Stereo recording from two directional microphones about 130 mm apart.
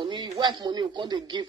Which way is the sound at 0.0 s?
35° right (ahead or behind).